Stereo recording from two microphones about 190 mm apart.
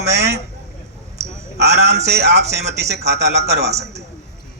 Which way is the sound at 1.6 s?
60° right (ahead or behind).